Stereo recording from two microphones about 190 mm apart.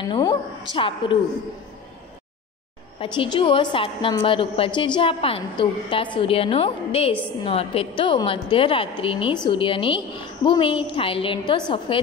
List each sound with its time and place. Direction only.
0.0 s a woman's voice: 25° left (ahead or behind)
3.0 s a woman's voice: 25° left (ahead or behind)